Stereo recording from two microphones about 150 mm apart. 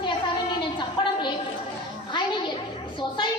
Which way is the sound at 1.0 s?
35° left (ahead or behind).